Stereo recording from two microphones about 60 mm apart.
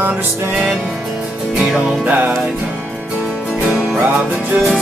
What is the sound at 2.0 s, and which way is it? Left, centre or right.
Music, right.